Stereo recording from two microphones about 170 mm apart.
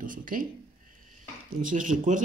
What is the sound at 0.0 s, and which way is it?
Speech, 55° right (ahead or behind).